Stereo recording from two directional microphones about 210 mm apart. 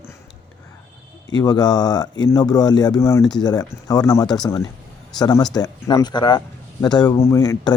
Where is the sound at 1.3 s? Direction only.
20° left (ahead or behind).